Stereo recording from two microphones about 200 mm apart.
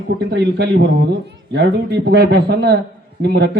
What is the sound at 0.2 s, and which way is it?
Speech, 60° right (ahead or behind).